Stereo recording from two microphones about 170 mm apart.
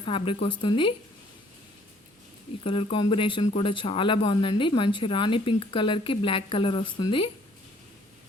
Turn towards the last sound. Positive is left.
turn(degrees=30)  # may be behind; listen again after turning